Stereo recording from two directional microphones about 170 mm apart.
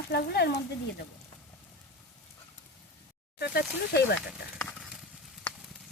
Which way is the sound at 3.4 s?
70° left (ahead or behind).